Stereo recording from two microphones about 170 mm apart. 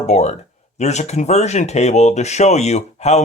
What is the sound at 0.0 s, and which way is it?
Speech, 40° left (ahead or behind).